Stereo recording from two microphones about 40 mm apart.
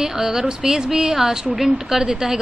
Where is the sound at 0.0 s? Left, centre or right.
Centre.